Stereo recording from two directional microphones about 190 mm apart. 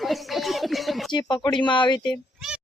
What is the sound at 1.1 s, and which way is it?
Speech, 25° left (ahead or behind).